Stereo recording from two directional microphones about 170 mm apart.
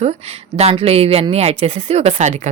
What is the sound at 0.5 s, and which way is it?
A woman's voice, 35° right (ahead or behind).